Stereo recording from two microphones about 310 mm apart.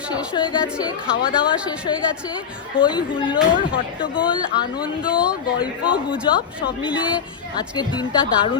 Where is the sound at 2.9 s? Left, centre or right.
Centre.